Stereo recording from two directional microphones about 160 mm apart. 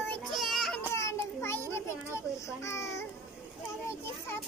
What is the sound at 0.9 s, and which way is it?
Children playing, 15° left (ahead or behind).